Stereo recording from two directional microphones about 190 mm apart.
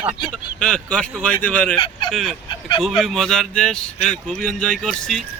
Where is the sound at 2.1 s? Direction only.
Centre (ahead or behind).